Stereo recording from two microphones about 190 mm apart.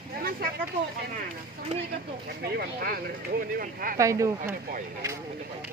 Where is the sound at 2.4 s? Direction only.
55° right (ahead or behind).